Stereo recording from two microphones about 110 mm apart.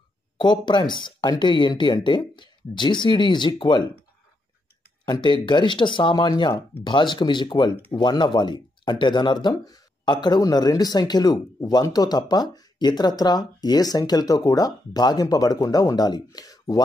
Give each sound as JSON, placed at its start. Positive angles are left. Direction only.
{"t": 0.4, "sound": "speech", "side_deg": 45}
{"t": 5.0, "sound": "speech", "side_deg": 45}